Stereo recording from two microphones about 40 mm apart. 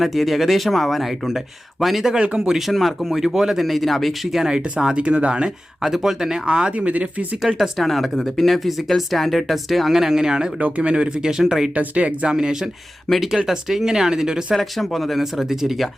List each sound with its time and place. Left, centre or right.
0.0 s speech: centre
2.2 s speech: right
2.5 s speech: centre
2.7 s speech: centre
3.1 s speech: centre
4.4 s speech: centre
4.9 s speech: right
5.8 s speech: centre; by 7.3 s right
7.8 s speech: centre
10.6 s speech: right; by 11.7 s centre
11.7 s speech: right
12.3 s speech: centre
14.5 s speech: centre
15.2 s speech: centre